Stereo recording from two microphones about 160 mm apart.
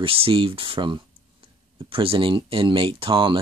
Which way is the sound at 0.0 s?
35° right (ahead or behind).